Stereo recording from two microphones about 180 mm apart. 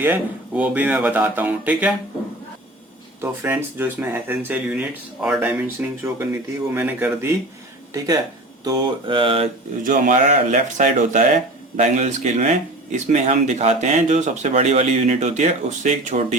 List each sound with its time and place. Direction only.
0.0 s speech: 10° right (ahead or behind)
3.2 s speech: 15° right (ahead or behind)
7.9 s mantra: 20° right (ahead or behind)
9.8 s speech: 45° right (ahead or behind)